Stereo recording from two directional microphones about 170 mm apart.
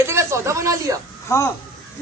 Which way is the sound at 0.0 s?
15° right (ahead or behind).